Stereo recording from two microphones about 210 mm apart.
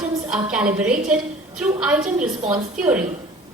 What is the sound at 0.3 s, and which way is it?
A woman's voice, 5° right (ahead or behind).